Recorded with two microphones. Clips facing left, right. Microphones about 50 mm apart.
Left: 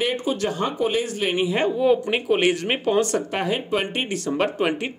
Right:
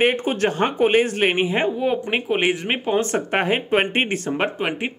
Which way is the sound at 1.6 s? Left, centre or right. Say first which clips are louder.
Left 2 dB; centre.